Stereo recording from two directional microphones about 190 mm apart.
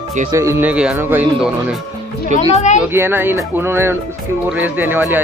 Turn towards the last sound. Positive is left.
turn(degrees=-10)  # may be behind; listen again after turning